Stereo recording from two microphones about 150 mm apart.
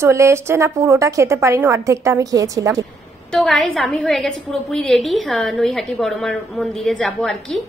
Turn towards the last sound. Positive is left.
turn(degrees=0)  # may be behind; listen again after turning